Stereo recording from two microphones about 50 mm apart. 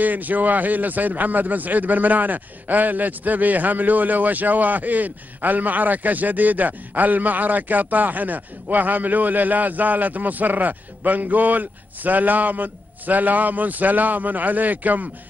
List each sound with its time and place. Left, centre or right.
0.0 s a man's voice: right